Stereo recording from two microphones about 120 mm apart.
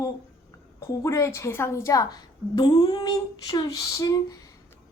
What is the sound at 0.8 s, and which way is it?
Speech, 25° left (ahead or behind).